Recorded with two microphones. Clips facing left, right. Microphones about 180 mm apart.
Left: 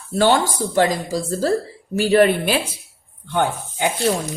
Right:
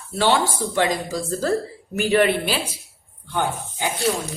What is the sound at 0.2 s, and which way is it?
Speech, 45° left (ahead or behind).